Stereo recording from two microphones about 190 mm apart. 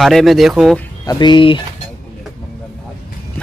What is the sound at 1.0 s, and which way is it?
Speech, 20° left (ahead or behind).